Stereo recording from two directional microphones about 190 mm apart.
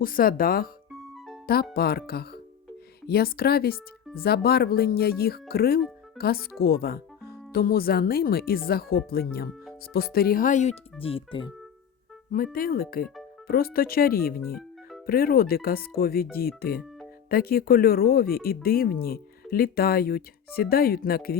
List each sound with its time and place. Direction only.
0.0 s speech: 50° left (ahead or behind)
1.7 s speech: 55° left (ahead or behind)
11.0 s speech: 30° left (ahead or behind)
12.5 s speech: 50° left (ahead or behind)